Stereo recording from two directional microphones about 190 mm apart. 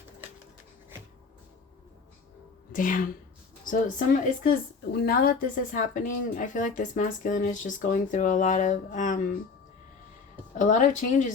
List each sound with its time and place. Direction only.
2.7 s a woman's voice: 45° left (ahead or behind)
10.6 s a woman's voice: 40° left (ahead or behind)